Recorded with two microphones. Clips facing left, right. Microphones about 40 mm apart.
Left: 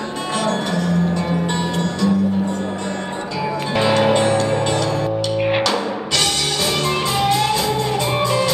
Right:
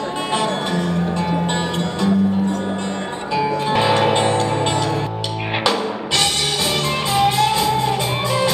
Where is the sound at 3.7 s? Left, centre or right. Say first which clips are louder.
Left 2 dB; centre.